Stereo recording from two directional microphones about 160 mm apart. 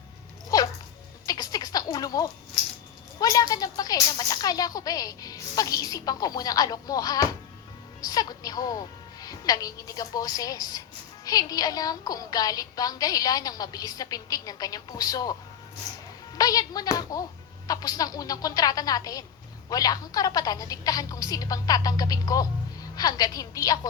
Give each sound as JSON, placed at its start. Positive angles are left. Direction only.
{"t": 0.5, "sound": "dog", "side_deg": 20}
{"t": 1.3, "sound": "a sound", "side_deg": 25}
{"t": 3.2, "sound": "speech", "side_deg": 25}
{"t": 16.4, "sound": "speech", "side_deg": 25}